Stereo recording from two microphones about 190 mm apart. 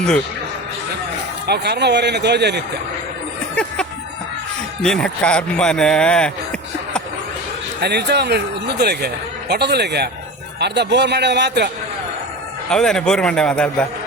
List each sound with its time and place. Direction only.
1.5 s speech: 60° right (ahead or behind)
3.5 s music: 5° left (ahead or behind)
4.8 s speech: 5° left (ahead or behind)
7.8 s speech: 60° right (ahead or behind)
12.7 s speech: 5° left (ahead or behind)